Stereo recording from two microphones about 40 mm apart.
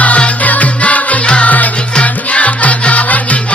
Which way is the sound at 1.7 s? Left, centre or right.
Left.